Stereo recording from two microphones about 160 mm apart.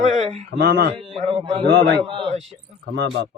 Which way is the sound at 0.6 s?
90° right.